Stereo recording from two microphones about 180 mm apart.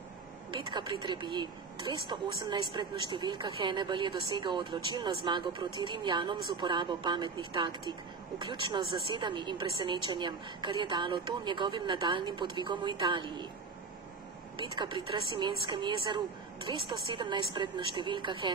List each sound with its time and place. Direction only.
0.5 s speech: 25° right (ahead or behind)
14.6 s speech: 25° right (ahead or behind)